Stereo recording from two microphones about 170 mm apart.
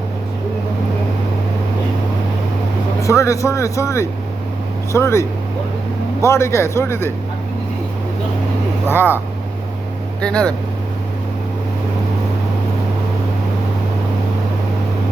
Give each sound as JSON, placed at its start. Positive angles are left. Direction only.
{"t": 3.0, "sound": "speech", "side_deg": 20}
{"t": 6.2, "sound": "speech", "side_deg": 15}
{"t": 8.9, "sound": "speech", "side_deg": 15}
{"t": 10.2, "sound": "speech", "side_deg": 5}